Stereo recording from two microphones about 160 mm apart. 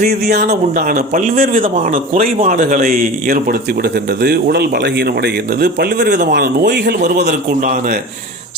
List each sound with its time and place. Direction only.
0.0 s speech: 85° right
0.8 s a man's voice: 60° right (ahead or behind)
4.2 s a man's voice: 75° right (ahead or behind)
7.3 s a man's voice: 50° right (ahead or behind)